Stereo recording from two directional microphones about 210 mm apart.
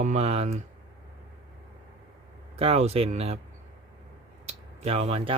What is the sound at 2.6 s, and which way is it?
Speech, 30° right (ahead or behind).